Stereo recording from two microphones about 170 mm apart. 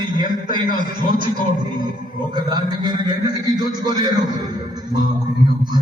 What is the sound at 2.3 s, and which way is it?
A man's voice, 25° right (ahead or behind).